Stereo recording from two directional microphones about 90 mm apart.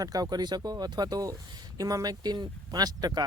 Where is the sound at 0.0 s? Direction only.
45° right (ahead or behind).